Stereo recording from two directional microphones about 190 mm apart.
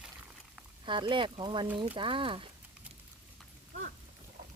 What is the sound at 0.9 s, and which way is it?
Speech, 25° right (ahead or behind).